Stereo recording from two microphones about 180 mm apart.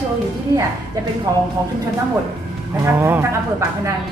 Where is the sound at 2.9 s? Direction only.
10° right (ahead or behind).